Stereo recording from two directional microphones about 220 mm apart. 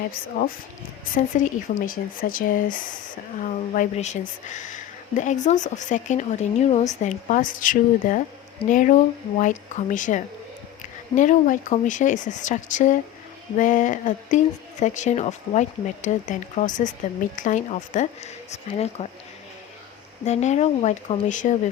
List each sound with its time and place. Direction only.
0.4 s speech: 40° left (ahead or behind)
20.2 s speech: 30° left (ahead or behind)